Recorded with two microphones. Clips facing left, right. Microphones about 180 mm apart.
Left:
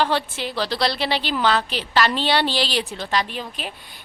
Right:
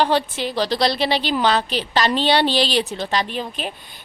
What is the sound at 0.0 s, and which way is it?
Speech, 15° right (ahead or behind).